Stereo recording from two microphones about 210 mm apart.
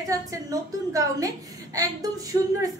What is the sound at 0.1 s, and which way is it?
A woman's voice, 15° right (ahead or behind).